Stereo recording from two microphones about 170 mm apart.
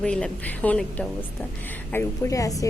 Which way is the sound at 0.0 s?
5° left (ahead or behind).